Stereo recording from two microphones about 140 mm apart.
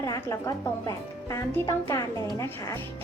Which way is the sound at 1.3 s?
20° left (ahead or behind).